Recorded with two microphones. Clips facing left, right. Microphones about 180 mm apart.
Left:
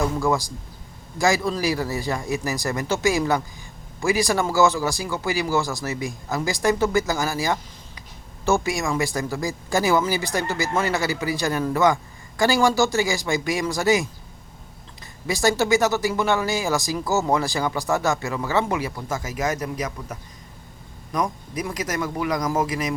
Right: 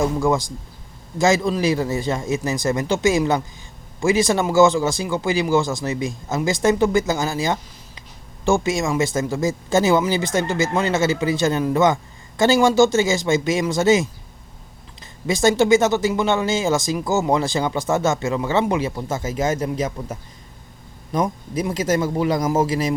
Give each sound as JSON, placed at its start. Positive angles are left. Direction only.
{"t": 0.0, "sound": "speech", "side_deg": -20}
{"t": 15.3, "sound": "speech", "side_deg": -20}